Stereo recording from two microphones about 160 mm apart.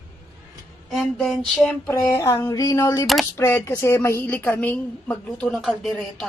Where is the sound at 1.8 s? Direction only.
20° left (ahead or behind).